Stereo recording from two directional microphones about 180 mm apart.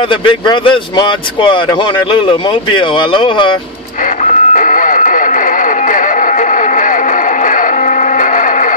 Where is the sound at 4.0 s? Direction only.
45° left (ahead or behind).